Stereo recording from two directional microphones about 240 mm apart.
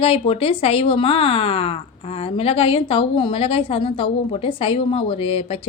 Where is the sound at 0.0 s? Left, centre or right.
Left.